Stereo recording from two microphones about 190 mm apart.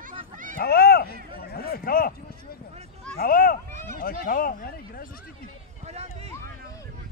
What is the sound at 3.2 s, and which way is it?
Speech, 50° left (ahead or behind).